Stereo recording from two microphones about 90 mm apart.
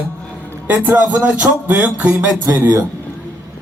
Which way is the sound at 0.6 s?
20° right (ahead or behind).